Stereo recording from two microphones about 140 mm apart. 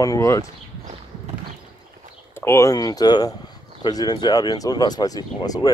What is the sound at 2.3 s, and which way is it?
Speech, 20° left (ahead or behind).